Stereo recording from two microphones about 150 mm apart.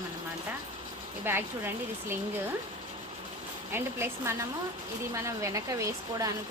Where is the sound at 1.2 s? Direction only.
15° right (ahead or behind).